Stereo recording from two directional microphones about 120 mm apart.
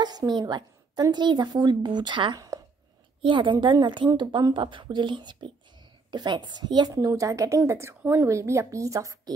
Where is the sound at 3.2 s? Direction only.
40° right (ahead or behind).